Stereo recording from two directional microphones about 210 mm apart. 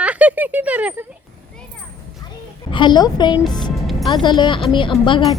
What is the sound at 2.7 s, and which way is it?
A woman's voice, 20° left (ahead or behind).